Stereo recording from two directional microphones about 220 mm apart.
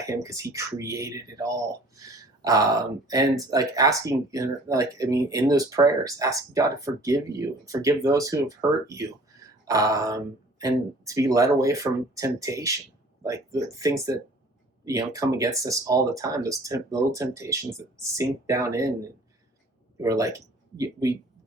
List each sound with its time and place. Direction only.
0.0 s speech: 15° right (ahead or behind)
20.0 s speech: 15° right (ahead or behind)